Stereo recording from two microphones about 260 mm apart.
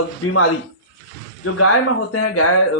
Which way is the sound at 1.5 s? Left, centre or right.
Left.